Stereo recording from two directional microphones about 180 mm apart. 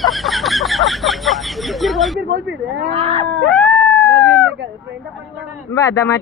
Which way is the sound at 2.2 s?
75° right (ahead or behind).